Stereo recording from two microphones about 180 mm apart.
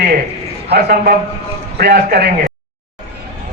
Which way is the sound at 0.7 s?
60° right (ahead or behind).